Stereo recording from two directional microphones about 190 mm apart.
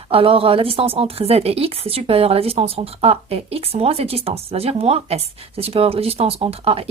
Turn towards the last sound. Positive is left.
turn(degrees=-30)  # may be behind; listen again after turning